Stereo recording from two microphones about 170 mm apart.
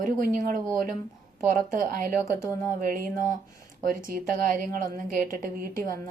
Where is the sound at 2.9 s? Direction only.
55° right (ahead or behind).